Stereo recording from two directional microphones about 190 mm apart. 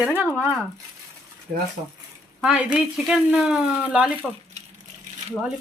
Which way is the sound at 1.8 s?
30° right (ahead or behind).